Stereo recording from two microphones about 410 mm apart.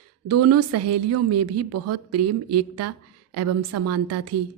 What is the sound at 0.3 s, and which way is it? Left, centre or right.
A woman's voice, right.